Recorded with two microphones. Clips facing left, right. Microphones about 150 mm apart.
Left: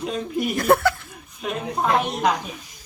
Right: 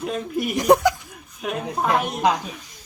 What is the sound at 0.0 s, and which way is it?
Speech, 5° right (ahead or behind).